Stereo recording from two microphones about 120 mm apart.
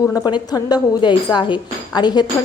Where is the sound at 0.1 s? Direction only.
35° left (ahead or behind).